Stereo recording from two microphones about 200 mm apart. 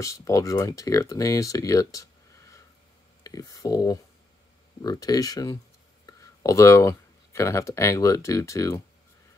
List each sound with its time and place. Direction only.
0.0 s speech: 15° left (ahead or behind)